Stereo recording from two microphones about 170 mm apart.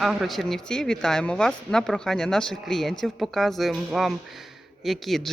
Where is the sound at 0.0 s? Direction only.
Centre (ahead or behind).